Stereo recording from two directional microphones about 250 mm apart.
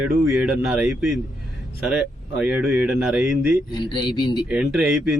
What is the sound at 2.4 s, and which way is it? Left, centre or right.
A man's voice, centre.